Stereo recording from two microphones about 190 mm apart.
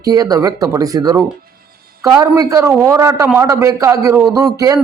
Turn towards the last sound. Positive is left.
turn(degrees=-20)  # may be behind; listen again after turning